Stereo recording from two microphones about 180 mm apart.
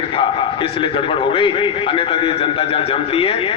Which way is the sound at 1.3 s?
30° left (ahead or behind).